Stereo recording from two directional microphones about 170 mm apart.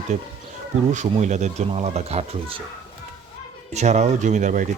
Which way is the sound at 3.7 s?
40° right (ahead or behind).